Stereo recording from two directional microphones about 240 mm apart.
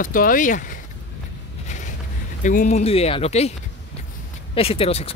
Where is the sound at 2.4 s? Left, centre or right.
Left.